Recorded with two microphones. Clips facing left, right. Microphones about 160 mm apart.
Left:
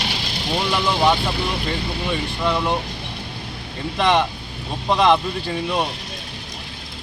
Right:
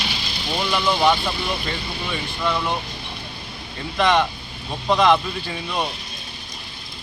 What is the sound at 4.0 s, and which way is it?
Speech, 30° left (ahead or behind).